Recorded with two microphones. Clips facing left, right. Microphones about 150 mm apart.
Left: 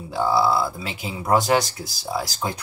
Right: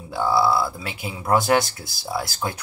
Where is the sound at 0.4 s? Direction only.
20° left (ahead or behind).